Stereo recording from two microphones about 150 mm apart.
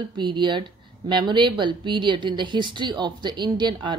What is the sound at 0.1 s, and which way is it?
Speech, 30° right (ahead or behind).